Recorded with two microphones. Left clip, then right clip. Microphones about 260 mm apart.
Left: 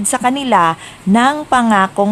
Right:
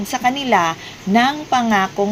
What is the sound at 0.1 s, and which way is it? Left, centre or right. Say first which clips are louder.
Speech: left 3 dB; left.